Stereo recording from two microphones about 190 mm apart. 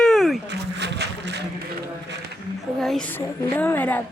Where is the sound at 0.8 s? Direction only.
65° right (ahead or behind).